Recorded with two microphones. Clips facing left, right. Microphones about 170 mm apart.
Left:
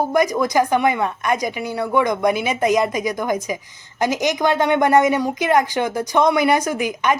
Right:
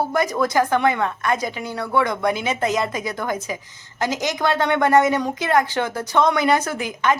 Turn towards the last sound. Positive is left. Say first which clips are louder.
# left 2 dB
turn(degrees=15)  # may be behind; listen again after turning